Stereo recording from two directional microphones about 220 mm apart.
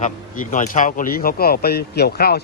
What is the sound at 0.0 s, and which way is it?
Speech, 35° left (ahead or behind).